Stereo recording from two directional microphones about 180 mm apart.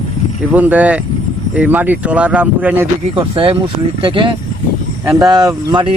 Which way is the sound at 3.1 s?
30° right (ahead or behind).